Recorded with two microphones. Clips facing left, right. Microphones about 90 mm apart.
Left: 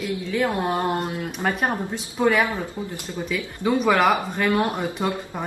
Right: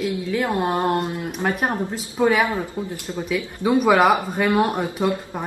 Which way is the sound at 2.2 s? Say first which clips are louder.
Right 1 dB; 15° right (ahead or behind).